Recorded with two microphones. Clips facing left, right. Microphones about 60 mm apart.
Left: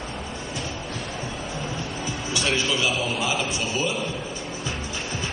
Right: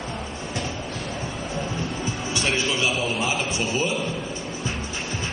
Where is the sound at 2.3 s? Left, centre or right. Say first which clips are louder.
Left 1 dB; right.